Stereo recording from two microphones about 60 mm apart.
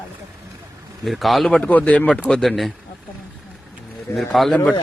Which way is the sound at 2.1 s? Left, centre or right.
Centre.